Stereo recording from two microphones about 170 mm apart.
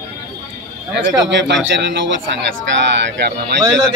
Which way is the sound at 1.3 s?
90° right.